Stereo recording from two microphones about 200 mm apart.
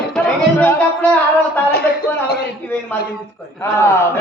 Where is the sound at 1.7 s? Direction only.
50° left (ahead or behind).